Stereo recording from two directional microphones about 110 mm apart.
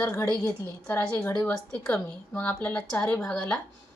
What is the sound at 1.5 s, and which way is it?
Speech, 5° left (ahead or behind).